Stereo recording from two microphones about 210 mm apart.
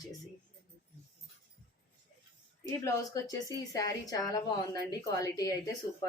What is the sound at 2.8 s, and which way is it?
Speech, 15° left (ahead or behind).